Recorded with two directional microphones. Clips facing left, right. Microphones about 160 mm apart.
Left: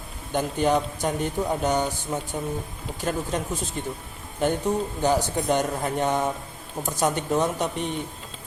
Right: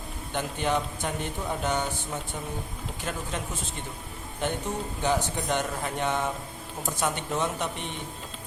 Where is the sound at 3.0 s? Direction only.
40° left (ahead or behind).